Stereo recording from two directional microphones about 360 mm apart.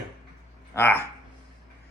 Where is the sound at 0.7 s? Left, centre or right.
Centre.